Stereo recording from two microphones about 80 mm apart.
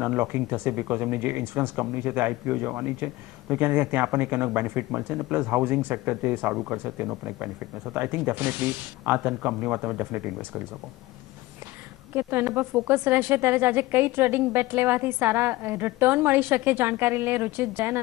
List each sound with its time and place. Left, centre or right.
0.0 s speech: right
12.2 s speech: right